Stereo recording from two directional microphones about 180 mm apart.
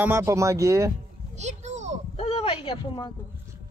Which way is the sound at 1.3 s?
40° right (ahead or behind).